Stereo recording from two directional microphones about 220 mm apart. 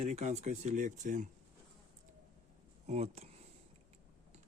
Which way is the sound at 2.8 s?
30° right (ahead or behind).